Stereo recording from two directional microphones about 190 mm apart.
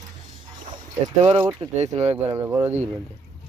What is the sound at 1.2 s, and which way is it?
Speech, 30° right (ahead or behind).